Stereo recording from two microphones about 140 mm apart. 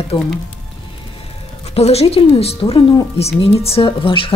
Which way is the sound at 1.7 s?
45° left (ahead or behind).